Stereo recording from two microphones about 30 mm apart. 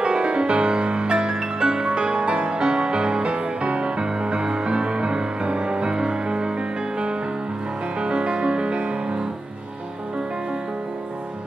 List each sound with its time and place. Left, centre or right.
0.0 s music: right
8.0 s music: right